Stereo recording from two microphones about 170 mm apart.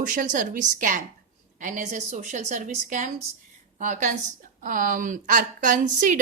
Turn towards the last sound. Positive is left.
turn(degrees=-50)  # may be behind; listen again after turning